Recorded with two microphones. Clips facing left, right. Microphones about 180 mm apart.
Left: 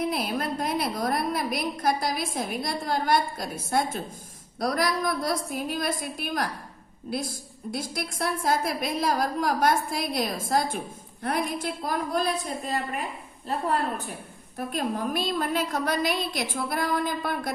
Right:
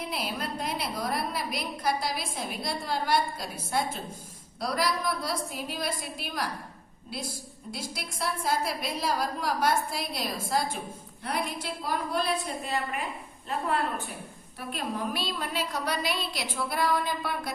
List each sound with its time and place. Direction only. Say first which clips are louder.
0.1 s a woman's voice: left 5 dB; 50° left (ahead or behind)
7.7 s a woman's voice: left 6 dB; 50° left (ahead or behind)
14.6 s a woman's voice: left 4 dB; 45° left (ahead or behind)